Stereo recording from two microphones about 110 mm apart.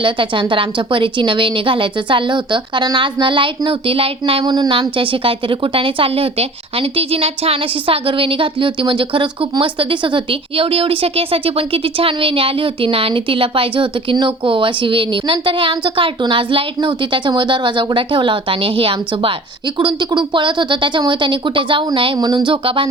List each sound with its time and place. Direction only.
0.0 s a woman's voice: 50° right (ahead or behind)
19.8 s a woman's voice: 45° right (ahead or behind)